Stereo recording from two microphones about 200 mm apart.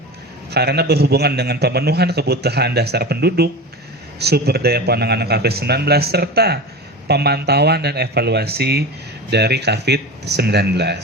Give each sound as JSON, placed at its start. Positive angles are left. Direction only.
{"t": 0.5, "sound": "a man's voice", "side_deg": -55}